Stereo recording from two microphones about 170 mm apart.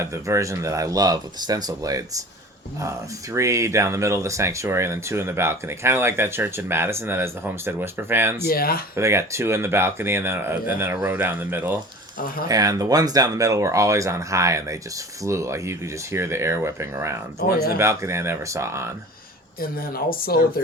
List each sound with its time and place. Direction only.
0.0 s speech: 15° right (ahead or behind)
3.3 s speech: 15° right (ahead or behind)
8.4 s speech: 60° left (ahead or behind)
9.0 s speech: 15° right (ahead or behind)
17.4 s speech: 60° left (ahead or behind)
17.7 s speech: 15° right (ahead or behind)
19.5 s speech: 60° left (ahead or behind)